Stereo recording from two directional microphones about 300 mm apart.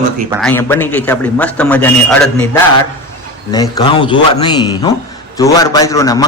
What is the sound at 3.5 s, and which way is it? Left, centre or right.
A man's voice, centre.